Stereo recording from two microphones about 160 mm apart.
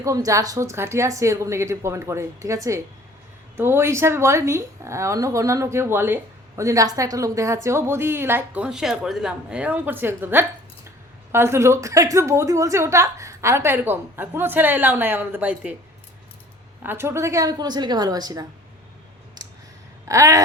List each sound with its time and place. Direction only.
0.0 s a woman's voice: 20° right (ahead or behind)
16.8 s a woman's voice: 15° right (ahead or behind)
19.4 s clicking: 25° right (ahead or behind)
20.1 s a woman's voice: 20° right (ahead or behind)